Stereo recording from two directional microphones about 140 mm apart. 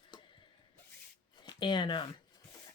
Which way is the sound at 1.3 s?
30° left (ahead or behind).